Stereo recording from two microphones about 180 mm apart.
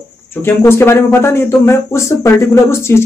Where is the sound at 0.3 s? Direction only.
10° left (ahead or behind).